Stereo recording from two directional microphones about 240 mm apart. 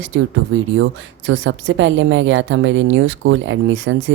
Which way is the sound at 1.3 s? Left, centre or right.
Right.